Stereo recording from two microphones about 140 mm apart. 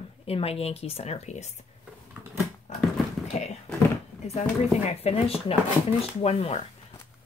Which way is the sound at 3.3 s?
55° left (ahead or behind).